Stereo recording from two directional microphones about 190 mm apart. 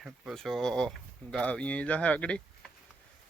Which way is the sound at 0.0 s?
Centre (ahead or behind).